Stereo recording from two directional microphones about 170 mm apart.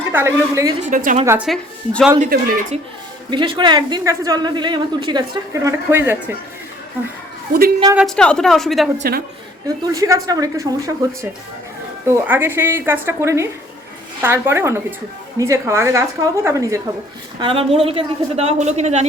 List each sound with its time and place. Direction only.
0.1 s speech: 15° right (ahead or behind)
0.9 s speech: 50° right (ahead or behind)
1.2 s speech: 15° right (ahead or behind)
1.5 s speech: 5° left (ahead or behind)
2.1 s speech: 50° right (ahead or behind)
3.2 s a woman's voice: 30° right (ahead or behind)
5.6 s speech: 15° right (ahead or behind)
7.9 s speech: 5° left (ahead or behind)
9.6 s a woman's voice: 20° right (ahead or behind)
17.4 s a woman's voice: 35° right (ahead or behind)